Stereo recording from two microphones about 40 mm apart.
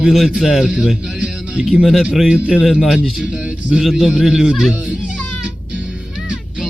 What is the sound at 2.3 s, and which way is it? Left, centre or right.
Speech, centre.